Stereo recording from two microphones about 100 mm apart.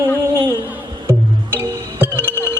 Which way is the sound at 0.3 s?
20° right (ahead or behind).